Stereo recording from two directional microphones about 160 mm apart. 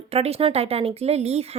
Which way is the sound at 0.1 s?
40° right (ahead or behind).